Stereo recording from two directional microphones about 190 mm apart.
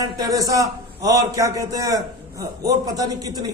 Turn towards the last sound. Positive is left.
turn(degrees=-20)  # may be behind; listen again after turning